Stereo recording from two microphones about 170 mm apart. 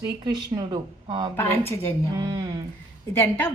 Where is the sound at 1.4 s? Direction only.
15° left (ahead or behind).